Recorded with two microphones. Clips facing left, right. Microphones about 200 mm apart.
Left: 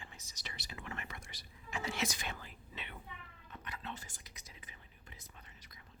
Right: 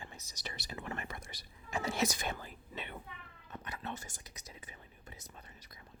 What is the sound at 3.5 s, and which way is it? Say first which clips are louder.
Cat: right 4 dB; 40° right (ahead or behind).